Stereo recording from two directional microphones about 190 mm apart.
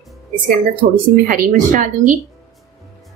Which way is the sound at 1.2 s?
45° right (ahead or behind).